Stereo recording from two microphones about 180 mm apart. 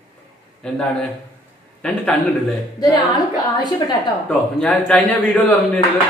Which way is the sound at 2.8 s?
20° left (ahead or behind).